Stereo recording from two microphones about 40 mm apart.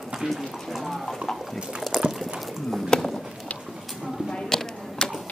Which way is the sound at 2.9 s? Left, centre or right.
Left.